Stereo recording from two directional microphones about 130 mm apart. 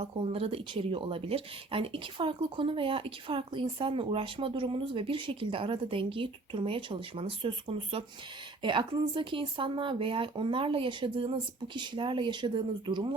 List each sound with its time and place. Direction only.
0.0 s speech: 45° right (ahead or behind)